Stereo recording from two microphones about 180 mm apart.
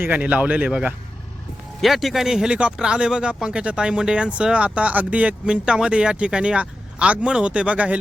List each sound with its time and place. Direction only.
0.0 s speech: 10° right (ahead or behind)